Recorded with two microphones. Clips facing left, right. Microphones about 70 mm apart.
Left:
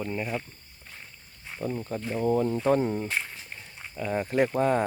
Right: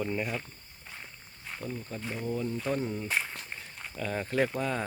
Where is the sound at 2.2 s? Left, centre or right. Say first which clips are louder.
Left 9 dB; left.